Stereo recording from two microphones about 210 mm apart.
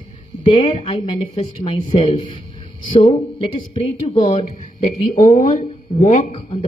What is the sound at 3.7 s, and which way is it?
Speech, 25° left (ahead or behind).